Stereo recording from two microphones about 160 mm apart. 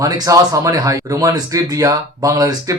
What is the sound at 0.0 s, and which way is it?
Speech, 20° right (ahead or behind).